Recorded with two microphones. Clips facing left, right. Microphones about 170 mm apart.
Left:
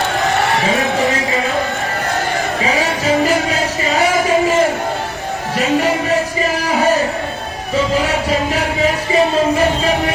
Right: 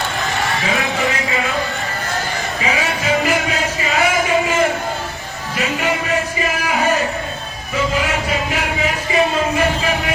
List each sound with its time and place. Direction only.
2.6 s music: 35° left (ahead or behind)
8.0 s music: 35° left (ahead or behind)